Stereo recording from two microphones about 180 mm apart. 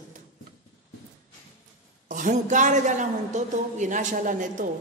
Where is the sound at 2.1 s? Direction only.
45° right (ahead or behind).